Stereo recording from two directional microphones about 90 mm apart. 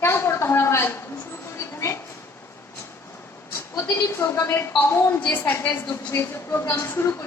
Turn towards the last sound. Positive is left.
turn(degrees=30)  # may be behind; listen again after turning